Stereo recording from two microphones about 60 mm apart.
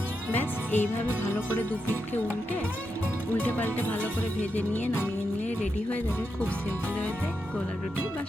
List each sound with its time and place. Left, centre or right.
0.3 s music: left
3.3 s music: left